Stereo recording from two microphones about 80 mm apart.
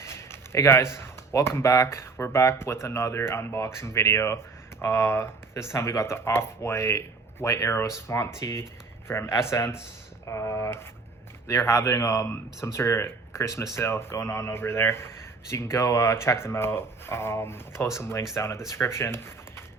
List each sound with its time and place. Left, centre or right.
0.0 s a man's voice: left